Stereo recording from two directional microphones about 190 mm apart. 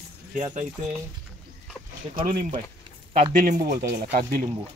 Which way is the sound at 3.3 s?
55° right (ahead or behind).